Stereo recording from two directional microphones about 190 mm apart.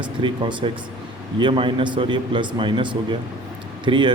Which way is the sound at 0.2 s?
25° right (ahead or behind).